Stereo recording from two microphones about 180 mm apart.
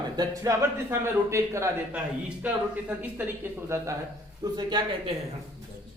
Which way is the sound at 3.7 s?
15° right (ahead or behind).